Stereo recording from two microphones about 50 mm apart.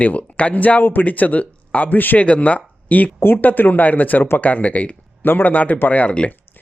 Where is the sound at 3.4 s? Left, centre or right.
Left.